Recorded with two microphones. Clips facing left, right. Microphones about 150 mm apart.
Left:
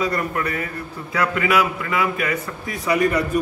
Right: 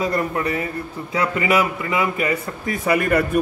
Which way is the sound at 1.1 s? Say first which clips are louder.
Even; 25° right (ahead or behind).